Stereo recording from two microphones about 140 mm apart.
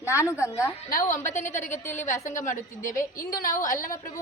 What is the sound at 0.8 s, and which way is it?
A woman's voice, 75° left (ahead or behind).